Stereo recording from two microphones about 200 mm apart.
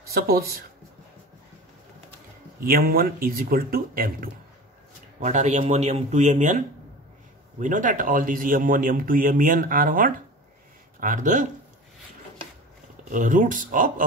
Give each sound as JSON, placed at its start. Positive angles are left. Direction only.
{"t": 0.1, "sound": "speech", "side_deg": -50}
{"t": 2.6, "sound": "speech", "side_deg": -45}
{"t": 7.6, "sound": "speech", "side_deg": -40}
{"t": 13.1, "sound": "speech", "side_deg": -40}